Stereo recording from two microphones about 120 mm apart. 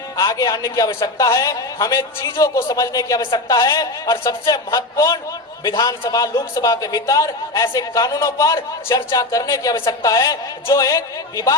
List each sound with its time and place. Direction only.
0.2 s a man's voice: 30° left (ahead or behind)